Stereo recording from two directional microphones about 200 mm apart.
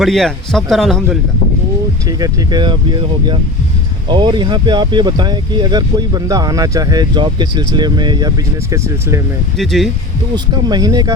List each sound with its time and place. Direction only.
0.0 s a man's voice: centre (ahead or behind)
2.0 s speech: 20° right (ahead or behind)
9.6 s a man's voice: centre (ahead or behind)
10.3 s speech: 20° right (ahead or behind)